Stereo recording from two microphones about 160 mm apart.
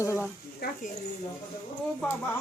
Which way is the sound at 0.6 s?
75° left (ahead or behind).